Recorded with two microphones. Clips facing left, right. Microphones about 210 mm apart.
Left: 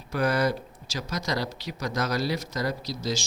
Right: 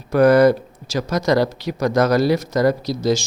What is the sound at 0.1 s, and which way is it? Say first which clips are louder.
Speech: right 13 dB; 55° right (ahead or behind).